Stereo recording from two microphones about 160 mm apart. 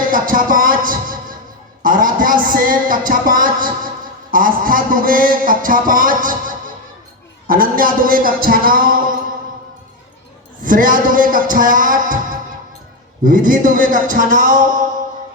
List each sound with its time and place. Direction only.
0.1 s music: 60° right (ahead or behind)
1.8 s a man's voice: 60° right (ahead or behind)
10.6 s a man's voice: 55° right (ahead or behind)